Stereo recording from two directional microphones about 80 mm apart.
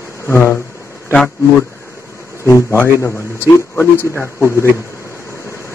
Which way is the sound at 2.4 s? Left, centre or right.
Left.